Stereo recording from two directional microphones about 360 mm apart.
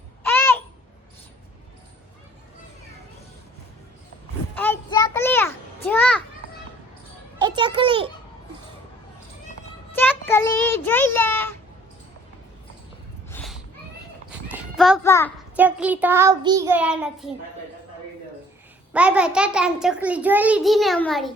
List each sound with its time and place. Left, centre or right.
0.2 s babbling: centre
4.5 s a sound: centre
7.3 s a child's voice: centre
9.9 s a child's voice: centre
13.3 s a sound: centre
14.3 s horse: centre
15.5 s a child's voice: centre
18.9 s a child's voice: centre